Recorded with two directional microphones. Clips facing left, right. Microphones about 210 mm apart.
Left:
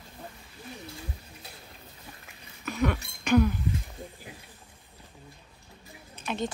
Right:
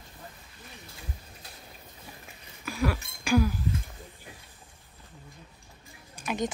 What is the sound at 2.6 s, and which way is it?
Cough, 5° right (ahead or behind).